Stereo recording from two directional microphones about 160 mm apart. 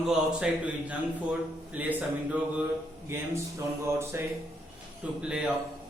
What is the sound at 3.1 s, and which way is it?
A man's voice, 15° right (ahead or behind).